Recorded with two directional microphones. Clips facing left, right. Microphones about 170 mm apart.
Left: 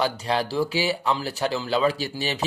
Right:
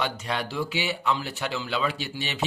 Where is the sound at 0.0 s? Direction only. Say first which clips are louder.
Left 5 dB; 35° left (ahead or behind).